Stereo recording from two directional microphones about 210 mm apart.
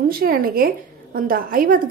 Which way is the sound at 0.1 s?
45° right (ahead or behind).